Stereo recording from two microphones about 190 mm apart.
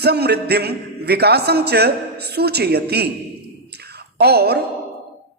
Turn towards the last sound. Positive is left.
turn(degrees=-55)  # may be behind; listen again after turning